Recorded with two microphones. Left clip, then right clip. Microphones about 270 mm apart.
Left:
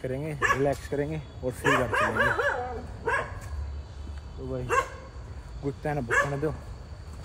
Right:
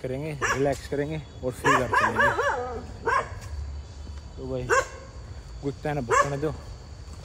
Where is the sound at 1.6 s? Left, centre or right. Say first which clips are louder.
Right 3 dB; right.